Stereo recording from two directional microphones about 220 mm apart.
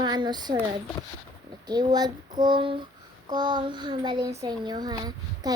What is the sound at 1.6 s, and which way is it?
Speech, 20° right (ahead or behind).